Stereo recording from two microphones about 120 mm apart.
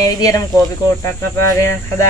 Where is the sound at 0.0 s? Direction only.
30° left (ahead or behind).